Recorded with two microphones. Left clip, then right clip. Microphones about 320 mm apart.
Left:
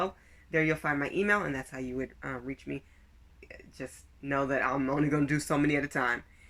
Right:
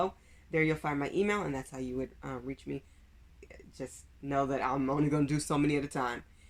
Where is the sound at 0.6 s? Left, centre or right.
Right.